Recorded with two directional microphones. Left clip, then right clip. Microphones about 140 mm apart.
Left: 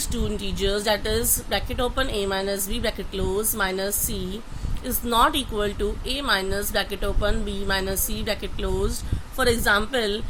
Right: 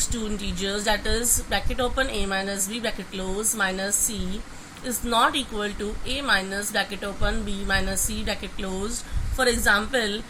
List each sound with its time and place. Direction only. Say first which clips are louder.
0.1 s a woman's voice: left 2 dB; 75° left (ahead or behind)